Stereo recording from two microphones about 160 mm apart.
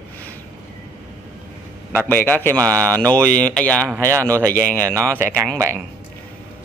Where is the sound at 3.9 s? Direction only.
20° right (ahead or behind).